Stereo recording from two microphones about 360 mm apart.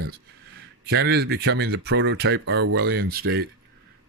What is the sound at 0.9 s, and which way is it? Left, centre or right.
Speech, right.